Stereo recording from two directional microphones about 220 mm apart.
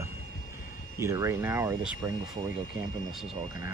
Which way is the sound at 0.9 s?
15° right (ahead or behind).